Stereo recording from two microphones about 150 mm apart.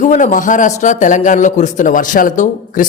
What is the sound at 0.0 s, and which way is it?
Speech, 55° left (ahead or behind).